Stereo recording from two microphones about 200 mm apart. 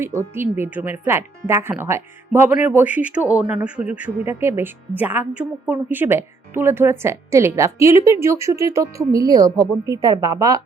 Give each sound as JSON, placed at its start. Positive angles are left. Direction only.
{"t": 0.2, "sound": "speech", "side_deg": -10}